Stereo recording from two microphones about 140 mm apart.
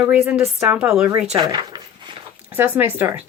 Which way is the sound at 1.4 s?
30° right (ahead or behind).